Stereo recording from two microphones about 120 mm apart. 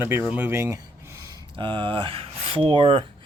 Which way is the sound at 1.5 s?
45° right (ahead or behind).